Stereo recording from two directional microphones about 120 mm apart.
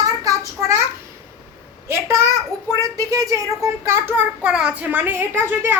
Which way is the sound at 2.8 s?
30° right (ahead or behind).